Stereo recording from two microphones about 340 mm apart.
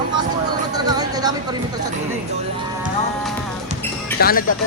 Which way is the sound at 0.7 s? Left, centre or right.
Centre.